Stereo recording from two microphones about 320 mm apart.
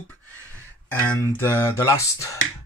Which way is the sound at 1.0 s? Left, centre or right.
Centre.